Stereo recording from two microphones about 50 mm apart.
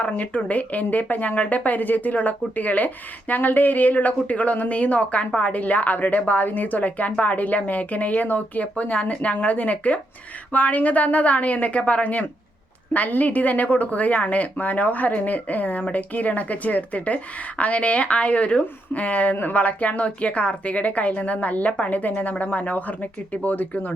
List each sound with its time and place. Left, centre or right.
0.2 s speech: left